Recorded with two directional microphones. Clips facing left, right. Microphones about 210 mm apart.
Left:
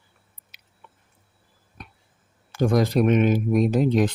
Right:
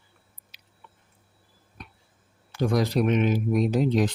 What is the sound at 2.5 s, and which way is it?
Speech, 50° left (ahead or behind).